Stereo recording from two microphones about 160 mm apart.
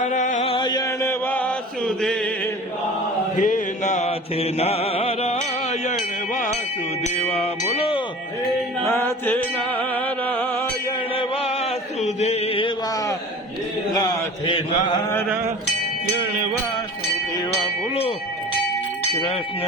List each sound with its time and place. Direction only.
0.0 s mantra: 50° left (ahead or behind)
0.5 s chant: 25° left (ahead or behind); by 2.5 s 5° left (ahead or behind)
3.3 s mantra: 55° left (ahead or behind)
7.0 s a sound: 40° left (ahead or behind)
8.9 s music: 15° left (ahead or behind)
11.1 s chant: 40° left (ahead or behind)
13.9 s chant: 30° left (ahead or behind)